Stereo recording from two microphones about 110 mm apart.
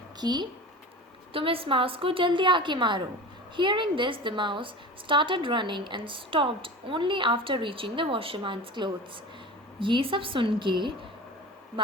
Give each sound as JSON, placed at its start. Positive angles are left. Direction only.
{"t": 0.2, "sound": "speech", "side_deg": -40}
{"t": 1.3, "sound": "a woman's voice", "side_deg": -55}